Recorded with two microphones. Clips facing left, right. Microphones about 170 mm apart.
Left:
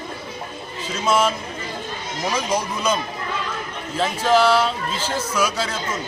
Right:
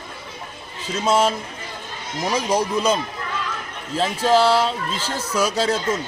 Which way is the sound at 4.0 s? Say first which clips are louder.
Even; 30° right (ahead or behind).